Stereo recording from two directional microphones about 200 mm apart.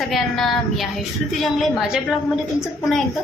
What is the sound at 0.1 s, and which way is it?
A woman's voice, centre (ahead or behind).